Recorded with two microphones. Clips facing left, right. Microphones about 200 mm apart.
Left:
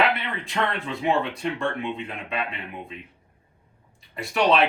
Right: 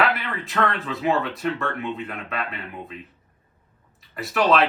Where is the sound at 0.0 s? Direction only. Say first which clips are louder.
Even; centre (ahead or behind).